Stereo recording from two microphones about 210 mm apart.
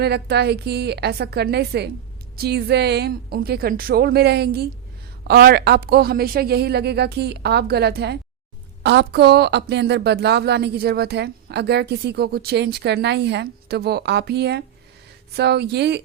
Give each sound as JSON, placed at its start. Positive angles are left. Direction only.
{"t": 0.0, "sound": "a woman's voice", "side_deg": -50}